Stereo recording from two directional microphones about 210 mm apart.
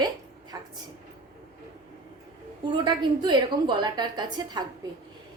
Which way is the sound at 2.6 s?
20° right (ahead or behind).